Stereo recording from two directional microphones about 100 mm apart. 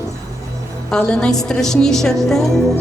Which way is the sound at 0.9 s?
5° left (ahead or behind).